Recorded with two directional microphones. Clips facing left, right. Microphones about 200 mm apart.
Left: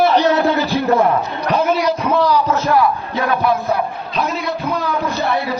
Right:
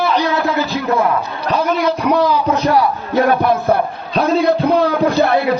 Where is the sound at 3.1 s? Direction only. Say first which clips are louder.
Right 4 dB; 50° right (ahead or behind).